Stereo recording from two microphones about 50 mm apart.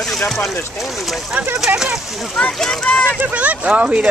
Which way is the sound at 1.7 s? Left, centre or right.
Right.